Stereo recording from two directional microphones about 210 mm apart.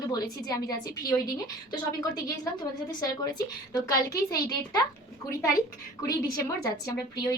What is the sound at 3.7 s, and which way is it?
A woman's voice, 15° left (ahead or behind).